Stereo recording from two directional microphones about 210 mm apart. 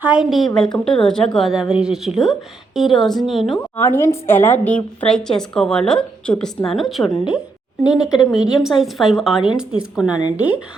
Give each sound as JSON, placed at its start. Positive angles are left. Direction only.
{"t": 0.0, "sound": "a woman's voice", "side_deg": -5}
{"t": 3.8, "sound": "a woman's voice", "side_deg": 10}
{"t": 10.1, "sound": "speech", "side_deg": 20}